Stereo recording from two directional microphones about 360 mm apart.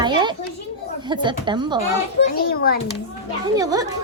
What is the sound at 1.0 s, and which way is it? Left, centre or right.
Speech, centre.